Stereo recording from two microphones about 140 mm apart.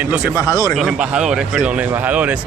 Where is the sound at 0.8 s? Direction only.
5° right (ahead or behind).